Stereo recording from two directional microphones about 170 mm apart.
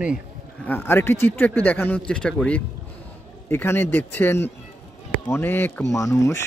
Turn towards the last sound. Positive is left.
turn(degrees=20)  # may be behind; listen again after turning